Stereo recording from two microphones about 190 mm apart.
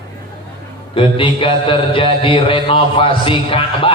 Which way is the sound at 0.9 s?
30° left (ahead or behind).